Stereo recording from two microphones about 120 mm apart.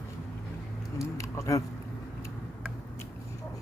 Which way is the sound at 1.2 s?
25° left (ahead or behind).